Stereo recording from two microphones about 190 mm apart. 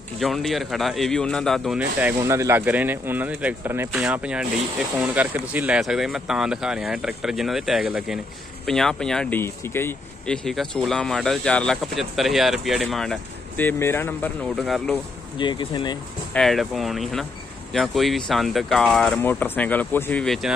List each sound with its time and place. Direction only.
0.2 s a man's voice: centre (ahead or behind)
15.3 s speech: 25° left (ahead or behind)
16.3 s speech: centre (ahead or behind)